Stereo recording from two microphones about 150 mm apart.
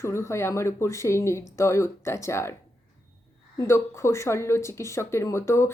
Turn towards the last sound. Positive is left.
turn(degrees=15)  # may be behind; listen again after turning